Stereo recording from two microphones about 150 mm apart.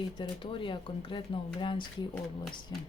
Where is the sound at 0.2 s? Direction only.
35° left (ahead or behind).